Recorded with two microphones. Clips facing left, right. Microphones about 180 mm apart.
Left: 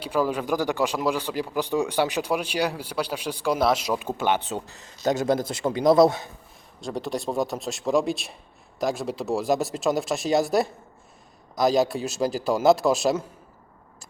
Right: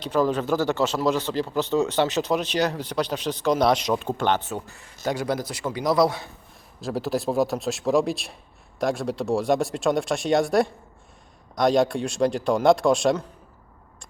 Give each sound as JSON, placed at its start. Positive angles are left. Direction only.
{"t": 0.0, "sound": "a man's voice", "side_deg": 10}
{"t": 6.7, "sound": "speech", "side_deg": 0}